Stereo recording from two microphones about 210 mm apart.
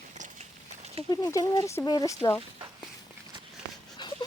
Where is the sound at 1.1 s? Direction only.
15° left (ahead or behind).